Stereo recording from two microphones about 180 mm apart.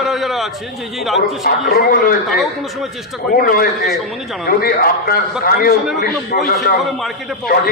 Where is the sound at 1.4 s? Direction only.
55° left (ahead or behind).